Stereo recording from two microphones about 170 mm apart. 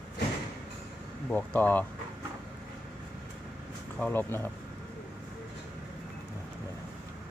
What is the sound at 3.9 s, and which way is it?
Speech, 10° left (ahead or behind).